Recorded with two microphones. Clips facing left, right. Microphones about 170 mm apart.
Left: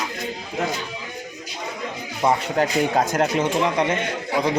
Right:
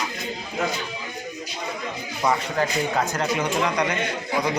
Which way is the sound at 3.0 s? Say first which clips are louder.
Left 5 dB; 45° left (ahead or behind).